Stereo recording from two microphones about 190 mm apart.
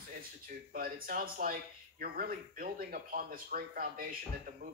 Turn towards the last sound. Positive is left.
turn(degrees=-50)  # may be behind; listen again after turning